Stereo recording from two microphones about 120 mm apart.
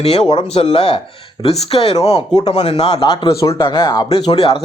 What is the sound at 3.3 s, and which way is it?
Speech, 25° left (ahead or behind).